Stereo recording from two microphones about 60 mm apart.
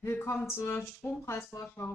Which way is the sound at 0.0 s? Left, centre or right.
Left.